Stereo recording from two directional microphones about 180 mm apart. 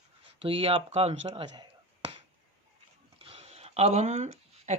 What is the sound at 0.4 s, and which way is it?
Speech, 30° right (ahead or behind).